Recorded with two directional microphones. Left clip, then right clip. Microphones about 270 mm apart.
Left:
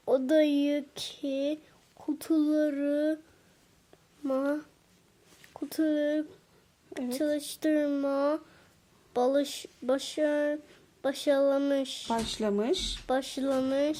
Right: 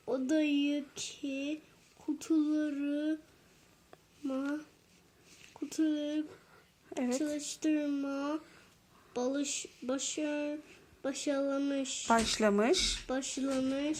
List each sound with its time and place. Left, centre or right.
0.0 s speech: left
1.2 s speech: left
2.4 s speech: left
4.3 s speech: left
12.3 s speech: centre
13.1 s speech: left